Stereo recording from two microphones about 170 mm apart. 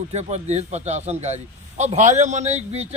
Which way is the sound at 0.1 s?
40° right (ahead or behind).